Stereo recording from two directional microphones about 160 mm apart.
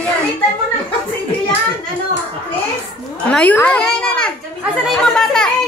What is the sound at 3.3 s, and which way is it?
A child's voice, 10° left (ahead or behind).